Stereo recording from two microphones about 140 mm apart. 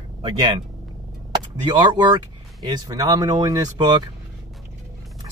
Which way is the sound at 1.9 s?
30° right (ahead or behind).